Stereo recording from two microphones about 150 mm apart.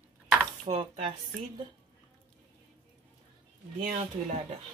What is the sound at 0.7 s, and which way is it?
Speech, 45° right (ahead or behind).